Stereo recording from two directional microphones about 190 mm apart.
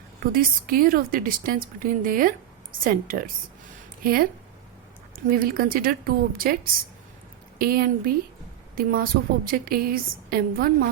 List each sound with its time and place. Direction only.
0.3 s a woman's voice: 50° right (ahead or behind)
7.6 s a woman's voice: 50° right (ahead or behind)